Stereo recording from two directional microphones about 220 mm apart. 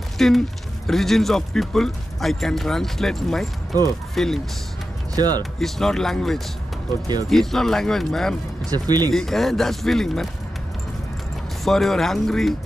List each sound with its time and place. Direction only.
0.2 s speech: centre (ahead or behind)
5.1 s speech: 20° right (ahead or behind)
5.4 s speech: centre (ahead or behind)
8.6 s speech: 15° right (ahead or behind)
9.1 s speech: centre (ahead or behind)
11.6 s speech: centre (ahead or behind)